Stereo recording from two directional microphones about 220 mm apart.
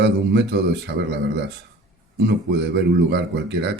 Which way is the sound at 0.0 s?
50° right (ahead or behind).